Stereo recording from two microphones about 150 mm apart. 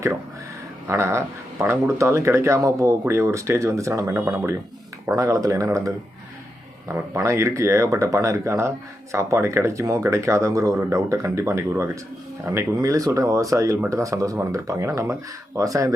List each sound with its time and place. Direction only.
0.9 s speech: 20° right (ahead or behind)